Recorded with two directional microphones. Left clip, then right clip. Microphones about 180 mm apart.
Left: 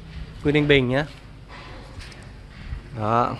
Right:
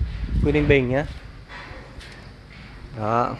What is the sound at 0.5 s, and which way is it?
Speech, 5° left (ahead or behind).